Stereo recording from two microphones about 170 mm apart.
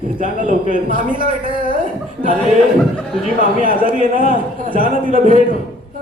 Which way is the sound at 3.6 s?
55° right (ahead or behind).